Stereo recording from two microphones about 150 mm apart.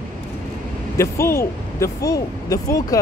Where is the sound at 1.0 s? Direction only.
15° left (ahead or behind).